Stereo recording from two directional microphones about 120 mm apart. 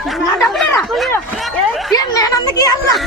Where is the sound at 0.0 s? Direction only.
Centre (ahead or behind).